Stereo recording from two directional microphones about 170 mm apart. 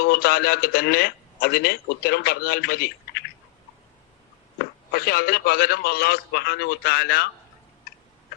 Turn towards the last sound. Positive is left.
turn(degrees=65)  # may be behind; listen again after turning